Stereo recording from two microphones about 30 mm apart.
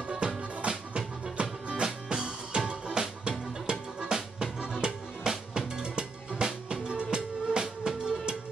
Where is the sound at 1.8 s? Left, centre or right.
Right.